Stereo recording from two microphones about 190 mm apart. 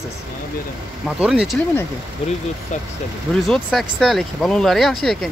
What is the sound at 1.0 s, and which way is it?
Speech, 5° right (ahead or behind).